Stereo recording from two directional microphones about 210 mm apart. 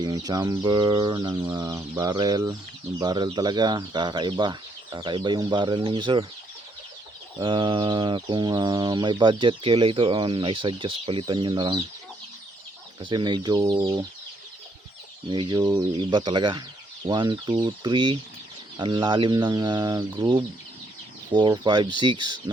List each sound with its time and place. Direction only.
0.0 s chicken: 20° right (ahead or behind)
7.3 s chicken: 20° right (ahead or behind)
13.0 s chicken: 20° right (ahead or behind)
15.3 s chicken: 20° right (ahead or behind)